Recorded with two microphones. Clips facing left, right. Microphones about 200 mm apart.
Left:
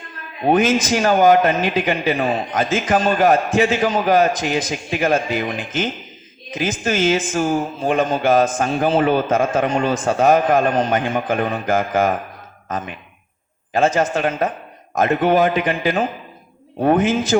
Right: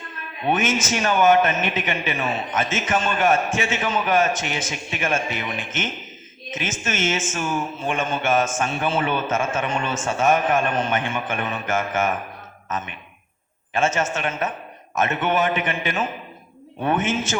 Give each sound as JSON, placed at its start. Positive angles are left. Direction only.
{"t": 0.4, "sound": "speech", "side_deg": 35}